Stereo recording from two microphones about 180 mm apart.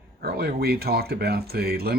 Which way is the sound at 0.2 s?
60° right (ahead or behind).